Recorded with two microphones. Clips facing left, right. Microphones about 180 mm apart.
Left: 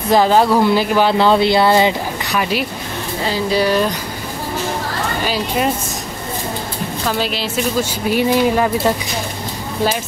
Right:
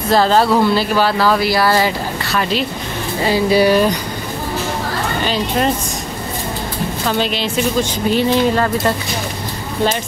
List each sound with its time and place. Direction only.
0.1 s speech: 15° left (ahead or behind)
3.3 s speech: 10° right (ahead or behind)
5.2 s speech: 5° left (ahead or behind)
7.1 s a woman's voice: 5° left (ahead or behind)